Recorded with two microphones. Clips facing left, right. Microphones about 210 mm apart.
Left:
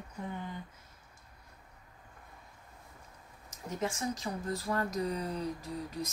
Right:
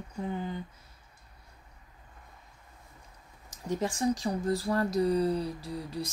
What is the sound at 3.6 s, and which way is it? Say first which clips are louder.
Speech: right 6 dB; 35° right (ahead or behind).